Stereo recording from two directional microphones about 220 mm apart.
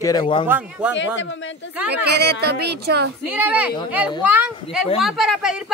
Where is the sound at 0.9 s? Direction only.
55° left (ahead or behind).